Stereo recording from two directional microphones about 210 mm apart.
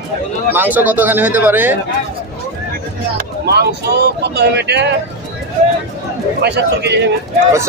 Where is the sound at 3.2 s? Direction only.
50° right (ahead or behind).